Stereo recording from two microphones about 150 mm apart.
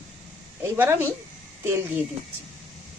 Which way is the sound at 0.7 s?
15° right (ahead or behind).